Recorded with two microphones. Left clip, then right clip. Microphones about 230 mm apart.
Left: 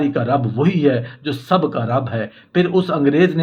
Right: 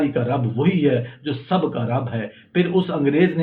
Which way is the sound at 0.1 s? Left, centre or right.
Left.